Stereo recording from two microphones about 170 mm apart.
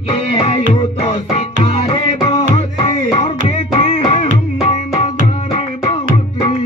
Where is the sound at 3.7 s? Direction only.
35° left (ahead or behind).